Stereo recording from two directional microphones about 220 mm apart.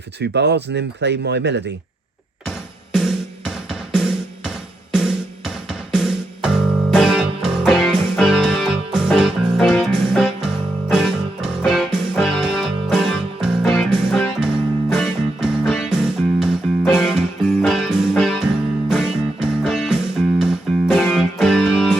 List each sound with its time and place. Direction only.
0.2 s speech: 50° right (ahead or behind)
2.9 s music: centre (ahead or behind)